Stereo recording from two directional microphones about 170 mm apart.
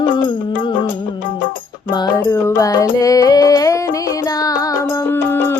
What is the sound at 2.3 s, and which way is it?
Music, 15° left (ahead or behind).